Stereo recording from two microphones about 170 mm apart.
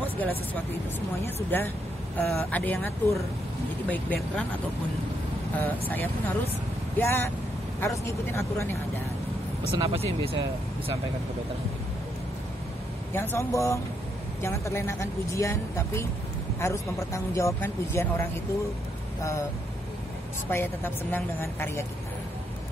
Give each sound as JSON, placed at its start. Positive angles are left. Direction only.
{"t": 1.2, "sound": "speech", "side_deg": 15}
{"t": 5.6, "sound": "speech", "side_deg": 10}
{"t": 9.8, "sound": "speech", "side_deg": -35}
{"t": 13.1, "sound": "speech", "side_deg": 15}
{"t": 20.4, "sound": "speech", "side_deg": 15}